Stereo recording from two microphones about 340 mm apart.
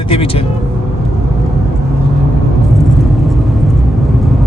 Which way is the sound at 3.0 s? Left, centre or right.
Centre.